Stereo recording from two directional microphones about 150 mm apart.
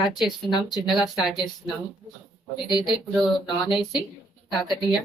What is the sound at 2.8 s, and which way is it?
Speech, centre (ahead or behind).